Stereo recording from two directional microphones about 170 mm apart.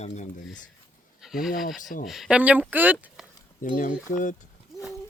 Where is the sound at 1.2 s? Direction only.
Centre (ahead or behind).